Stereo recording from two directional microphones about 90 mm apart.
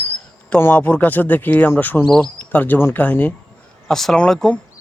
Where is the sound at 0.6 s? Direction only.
20° left (ahead or behind).